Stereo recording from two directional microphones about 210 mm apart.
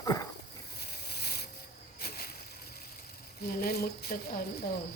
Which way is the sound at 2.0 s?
50° left (ahead or behind).